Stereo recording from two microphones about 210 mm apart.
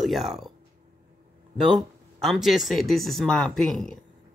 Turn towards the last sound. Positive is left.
turn(degrees=0)  # may be behind; listen again after turning